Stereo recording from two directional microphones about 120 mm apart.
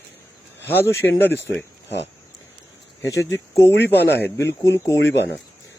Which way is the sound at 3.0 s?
25° left (ahead or behind).